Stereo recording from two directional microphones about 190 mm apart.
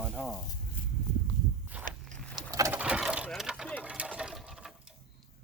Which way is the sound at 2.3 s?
20° right (ahead or behind).